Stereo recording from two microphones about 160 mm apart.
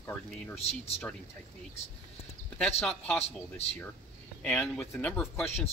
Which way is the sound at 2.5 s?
5° left (ahead or behind).